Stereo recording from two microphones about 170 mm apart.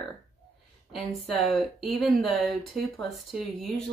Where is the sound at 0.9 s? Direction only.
Centre (ahead or behind).